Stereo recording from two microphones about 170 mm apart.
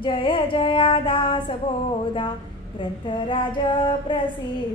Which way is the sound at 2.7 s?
30° left (ahead or behind).